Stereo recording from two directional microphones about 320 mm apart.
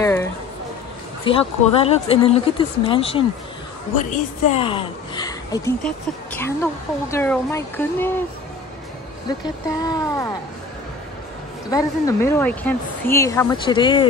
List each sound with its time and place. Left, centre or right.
0.0 s a sound: centre
1.2 s a woman's voice: centre
9.4 s a woman's voice: centre
11.7 s a woman's voice: centre